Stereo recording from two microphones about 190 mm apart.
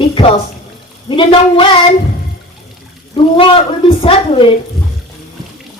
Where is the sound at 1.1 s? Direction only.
25° left (ahead or behind).